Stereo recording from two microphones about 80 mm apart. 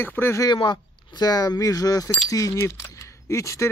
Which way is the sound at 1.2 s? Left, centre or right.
Left.